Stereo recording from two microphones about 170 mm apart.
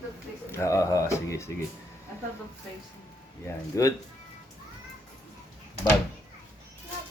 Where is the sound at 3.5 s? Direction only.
20° left (ahead or behind).